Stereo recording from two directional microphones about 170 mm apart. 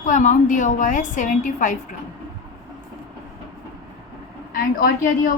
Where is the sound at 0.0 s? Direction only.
50° left (ahead or behind).